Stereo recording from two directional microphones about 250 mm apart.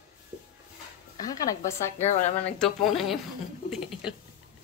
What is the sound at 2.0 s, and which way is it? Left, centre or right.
Speech, centre.